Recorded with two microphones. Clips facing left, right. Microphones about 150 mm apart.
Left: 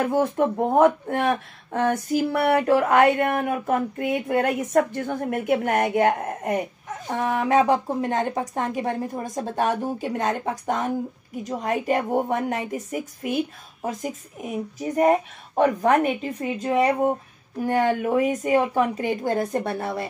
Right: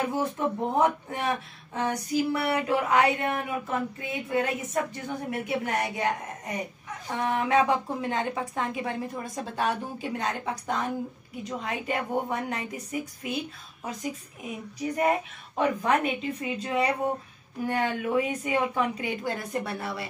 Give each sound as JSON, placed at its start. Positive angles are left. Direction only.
{"t": 0.0, "sound": "speech", "side_deg": 50}